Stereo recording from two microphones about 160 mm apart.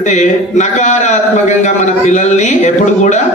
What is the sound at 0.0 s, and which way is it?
A man's voice, 50° left (ahead or behind).